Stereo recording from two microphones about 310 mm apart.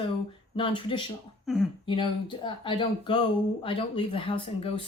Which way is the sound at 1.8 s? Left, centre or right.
Centre.